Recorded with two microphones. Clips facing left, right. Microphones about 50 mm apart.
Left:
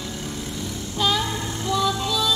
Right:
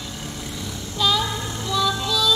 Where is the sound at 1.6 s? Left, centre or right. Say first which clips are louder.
Even; left.